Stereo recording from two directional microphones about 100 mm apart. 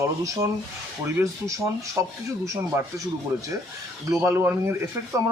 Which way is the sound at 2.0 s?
30° right (ahead or behind).